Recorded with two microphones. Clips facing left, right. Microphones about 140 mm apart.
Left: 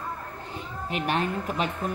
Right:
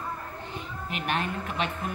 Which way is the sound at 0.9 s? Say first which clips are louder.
Left 3 dB; 35° left (ahead or behind).